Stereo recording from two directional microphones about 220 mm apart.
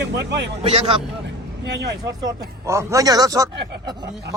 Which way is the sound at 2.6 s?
10° right (ahead or behind).